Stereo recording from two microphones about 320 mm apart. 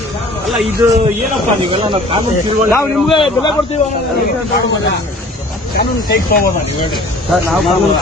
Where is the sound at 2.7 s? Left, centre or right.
Centre.